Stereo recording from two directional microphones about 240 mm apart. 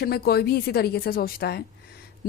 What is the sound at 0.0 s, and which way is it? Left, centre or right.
A woman's voice, left.